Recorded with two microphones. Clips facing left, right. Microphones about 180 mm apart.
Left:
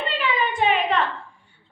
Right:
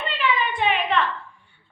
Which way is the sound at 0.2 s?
40° left (ahead or behind).